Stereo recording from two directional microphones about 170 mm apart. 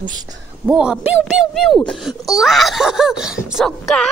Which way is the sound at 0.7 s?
5° right (ahead or behind).